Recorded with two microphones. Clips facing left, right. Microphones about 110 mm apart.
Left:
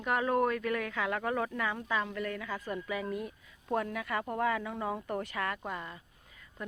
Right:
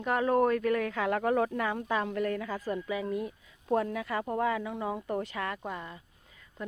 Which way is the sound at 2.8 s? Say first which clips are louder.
Right 3 dB; 25° right (ahead or behind).